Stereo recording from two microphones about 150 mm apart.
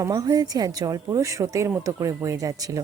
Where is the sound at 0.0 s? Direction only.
20° right (ahead or behind).